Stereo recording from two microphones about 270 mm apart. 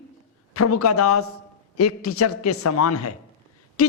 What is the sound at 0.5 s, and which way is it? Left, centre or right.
A man's voice, left.